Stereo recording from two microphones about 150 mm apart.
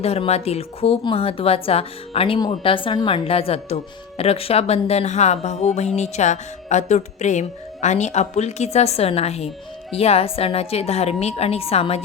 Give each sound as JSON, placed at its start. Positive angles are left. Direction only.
{"t": 0.0, "sound": "a woman's voice", "side_deg": 45}